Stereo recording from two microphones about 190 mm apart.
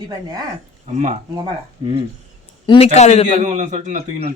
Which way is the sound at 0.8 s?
35° right (ahead or behind).